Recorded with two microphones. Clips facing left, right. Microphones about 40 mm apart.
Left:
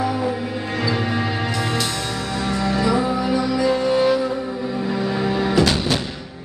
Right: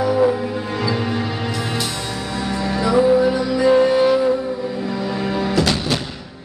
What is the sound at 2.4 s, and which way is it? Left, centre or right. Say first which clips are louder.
Music: even; centre.